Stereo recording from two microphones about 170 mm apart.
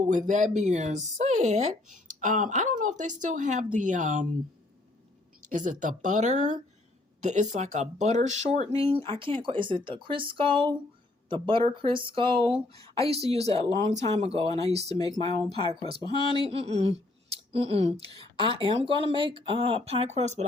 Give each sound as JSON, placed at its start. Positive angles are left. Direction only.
{"t": 0.0, "sound": "speech", "side_deg": -45}
{"t": 5.5, "sound": "speech", "side_deg": -50}
{"t": 14.9, "sound": "speech", "side_deg": 25}
{"t": 15.7, "sound": "speech", "side_deg": -30}
{"t": 16.0, "sound": "speech", "side_deg": 25}
{"t": 16.4, "sound": "speech", "side_deg": -35}